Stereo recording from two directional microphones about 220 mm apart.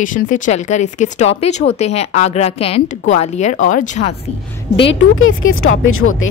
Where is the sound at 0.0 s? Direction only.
35° left (ahead or behind).